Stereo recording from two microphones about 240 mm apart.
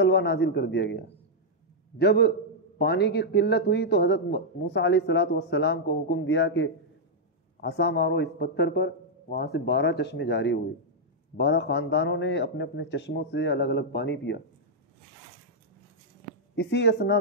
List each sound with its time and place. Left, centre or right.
0.0 s speech: left
16.5 s speech: left